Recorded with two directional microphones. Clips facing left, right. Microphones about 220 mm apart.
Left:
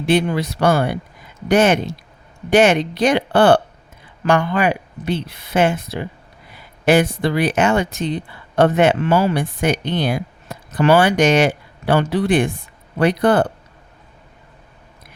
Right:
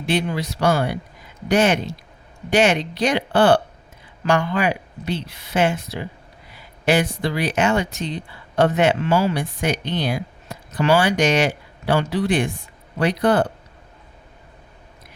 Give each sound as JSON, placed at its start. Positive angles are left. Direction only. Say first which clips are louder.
{"t": 0.0, "sound": "speech", "louder": "left 5 dB", "side_deg": 55}